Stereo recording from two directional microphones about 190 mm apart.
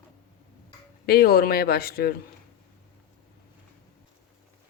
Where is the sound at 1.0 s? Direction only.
55° left (ahead or behind).